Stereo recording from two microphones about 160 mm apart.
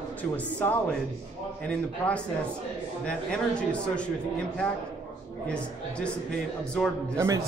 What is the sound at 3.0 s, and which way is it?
A man's voice, 5° left (ahead or behind).